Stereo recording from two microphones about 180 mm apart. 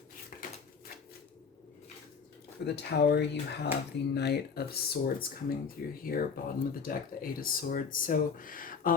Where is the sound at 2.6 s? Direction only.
65° left (ahead or behind).